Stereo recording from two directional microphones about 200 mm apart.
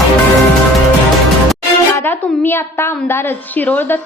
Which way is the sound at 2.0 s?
10° left (ahead or behind).